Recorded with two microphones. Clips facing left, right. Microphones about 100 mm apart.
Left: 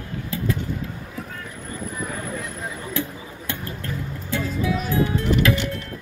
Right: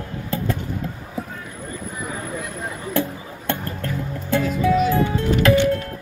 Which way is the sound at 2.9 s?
50° right (ahead or behind).